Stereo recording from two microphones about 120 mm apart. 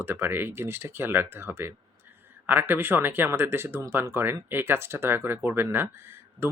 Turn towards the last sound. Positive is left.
turn(degrees=-20)  # may be behind; listen again after turning